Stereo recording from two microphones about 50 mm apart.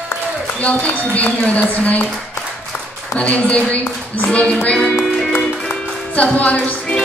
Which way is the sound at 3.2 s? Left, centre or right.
Left.